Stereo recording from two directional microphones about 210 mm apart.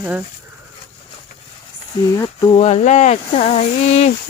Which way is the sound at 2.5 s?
30° left (ahead or behind).